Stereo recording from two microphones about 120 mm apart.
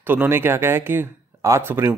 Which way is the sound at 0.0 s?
15° right (ahead or behind).